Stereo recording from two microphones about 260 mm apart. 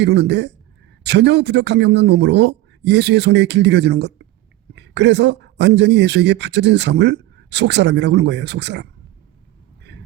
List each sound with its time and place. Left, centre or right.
0.0 s speech: right